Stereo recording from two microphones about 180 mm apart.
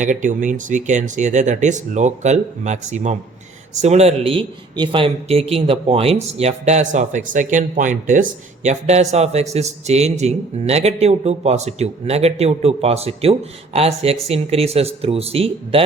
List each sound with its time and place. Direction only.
0.0 s speech: 45° right (ahead or behind)